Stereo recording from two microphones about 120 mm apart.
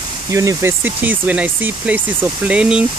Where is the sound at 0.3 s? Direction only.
25° right (ahead or behind).